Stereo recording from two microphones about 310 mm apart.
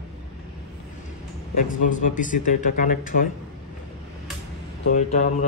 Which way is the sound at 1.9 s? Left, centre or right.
Left.